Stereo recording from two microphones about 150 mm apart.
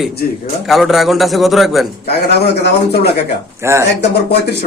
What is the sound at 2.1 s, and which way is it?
Speech, 90° left.